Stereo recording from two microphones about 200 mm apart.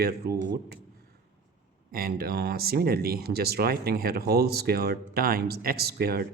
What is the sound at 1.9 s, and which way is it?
A man's voice, 50° right (ahead or behind).